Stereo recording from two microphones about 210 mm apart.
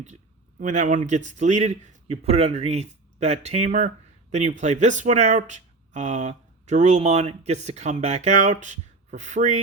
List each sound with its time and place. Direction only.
0.6 s a man's voice: 35° right (ahead or behind)